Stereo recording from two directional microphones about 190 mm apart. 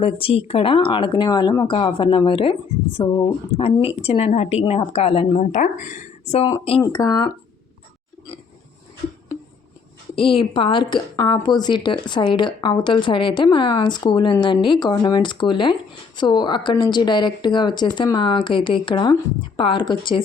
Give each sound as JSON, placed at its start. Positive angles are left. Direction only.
{"t": 0.0, "sound": "speech", "side_deg": 30}
{"t": 10.2, "sound": "speech", "side_deg": 25}